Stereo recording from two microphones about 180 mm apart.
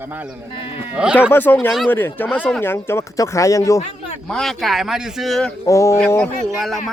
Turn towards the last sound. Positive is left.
turn(degrees=0)  # may be behind; listen again after turning